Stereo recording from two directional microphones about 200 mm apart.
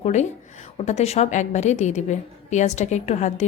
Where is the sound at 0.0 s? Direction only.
35° left (ahead or behind).